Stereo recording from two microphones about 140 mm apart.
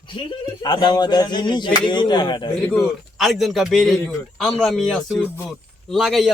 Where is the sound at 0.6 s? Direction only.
30° left (ahead or behind).